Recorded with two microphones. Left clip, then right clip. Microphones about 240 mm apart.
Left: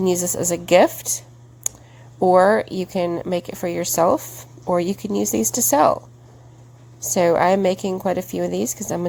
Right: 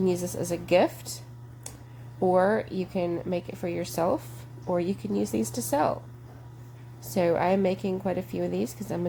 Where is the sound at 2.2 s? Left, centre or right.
Left.